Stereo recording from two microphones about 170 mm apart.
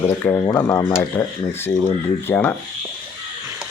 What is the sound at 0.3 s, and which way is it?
Speech, 15° left (ahead or behind).